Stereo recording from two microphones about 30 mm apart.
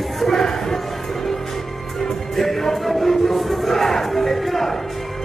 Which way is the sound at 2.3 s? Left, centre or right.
Centre.